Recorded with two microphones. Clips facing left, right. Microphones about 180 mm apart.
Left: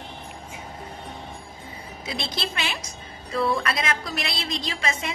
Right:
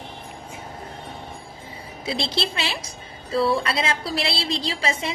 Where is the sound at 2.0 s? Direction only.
30° right (ahead or behind).